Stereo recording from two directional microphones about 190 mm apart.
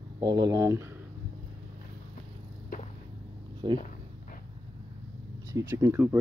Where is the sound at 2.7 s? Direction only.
50° left (ahead or behind).